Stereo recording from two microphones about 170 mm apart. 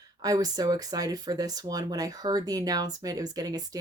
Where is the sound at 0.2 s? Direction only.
20° right (ahead or behind).